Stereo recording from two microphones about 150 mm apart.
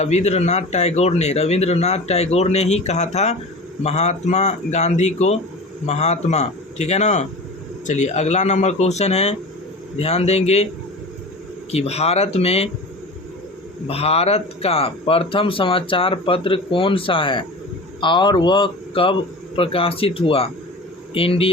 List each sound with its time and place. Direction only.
0.0 s speech: 50° left (ahead or behind)
11.7 s speech: 45° left (ahead or behind)
13.8 s speech: 40° left (ahead or behind)